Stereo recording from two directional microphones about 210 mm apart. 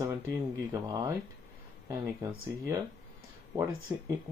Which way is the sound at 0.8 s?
20° right (ahead or behind).